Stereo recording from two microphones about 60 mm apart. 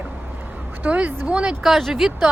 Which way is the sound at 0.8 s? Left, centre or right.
Right.